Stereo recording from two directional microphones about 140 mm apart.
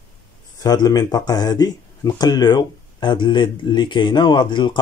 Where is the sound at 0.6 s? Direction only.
25° left (ahead or behind).